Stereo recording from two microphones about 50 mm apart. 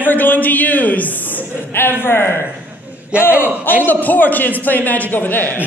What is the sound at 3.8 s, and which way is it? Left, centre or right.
A woman's voice, left.